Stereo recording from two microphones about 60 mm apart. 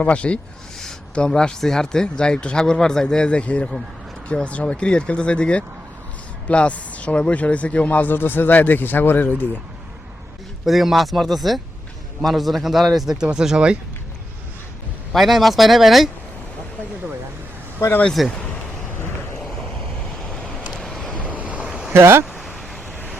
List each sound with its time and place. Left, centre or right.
0.0 s speech: left
10.7 s speech: centre
15.1 s speech: centre
18.2 s speech: centre
20.1 s vehicle: centre
21.2 s waves: right
21.7 s vehicle: centre
21.9 s speech: right
22.4 s a sound: centre